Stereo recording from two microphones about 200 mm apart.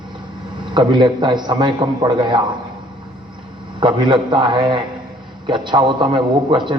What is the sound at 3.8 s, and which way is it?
A man's voice, 25° right (ahead or behind).